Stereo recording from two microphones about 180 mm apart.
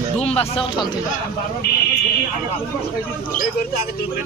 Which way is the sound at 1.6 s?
60° left (ahead or behind).